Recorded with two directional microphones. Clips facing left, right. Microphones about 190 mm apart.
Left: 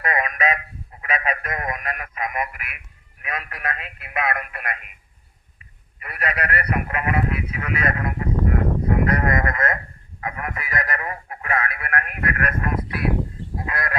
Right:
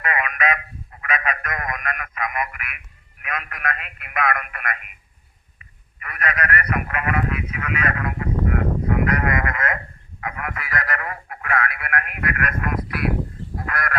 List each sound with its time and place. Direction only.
0.0 s a sound: 35° left (ahead or behind)
3.2 s a man's voice: 30° left (ahead or behind)
6.0 s a sound: 30° left (ahead or behind)
10.2 s radio: 30° left (ahead or behind)
11.9 s speech: 35° left (ahead or behind)
13.6 s goose: 20° left (ahead or behind)